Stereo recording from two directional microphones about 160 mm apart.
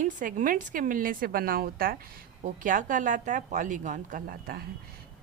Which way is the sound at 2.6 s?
55° right (ahead or behind).